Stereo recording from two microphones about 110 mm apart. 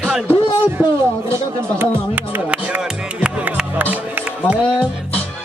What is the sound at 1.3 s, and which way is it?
Speech, 20° right (ahead or behind).